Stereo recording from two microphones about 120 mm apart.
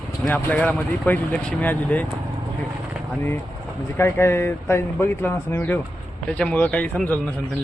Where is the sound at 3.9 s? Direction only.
20° left (ahead or behind).